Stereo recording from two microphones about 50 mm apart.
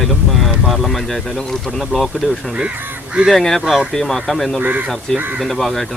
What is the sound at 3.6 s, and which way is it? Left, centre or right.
Speech, centre.